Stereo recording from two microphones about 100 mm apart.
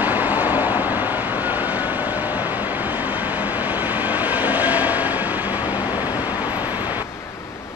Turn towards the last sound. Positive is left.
turn(degrees=-20)  # may be behind; listen again after turning